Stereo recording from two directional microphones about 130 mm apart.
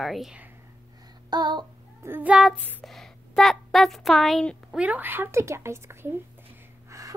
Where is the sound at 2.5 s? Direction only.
15° left (ahead or behind).